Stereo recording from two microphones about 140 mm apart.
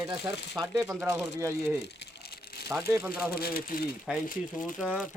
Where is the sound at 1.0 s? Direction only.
20° right (ahead or behind).